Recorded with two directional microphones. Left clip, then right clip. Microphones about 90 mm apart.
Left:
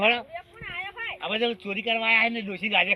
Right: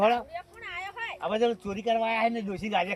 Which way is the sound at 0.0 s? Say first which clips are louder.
Left 1 dB; 55° right (ahead or behind).